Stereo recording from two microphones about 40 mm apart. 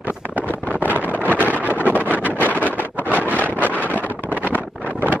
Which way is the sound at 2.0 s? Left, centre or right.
Right.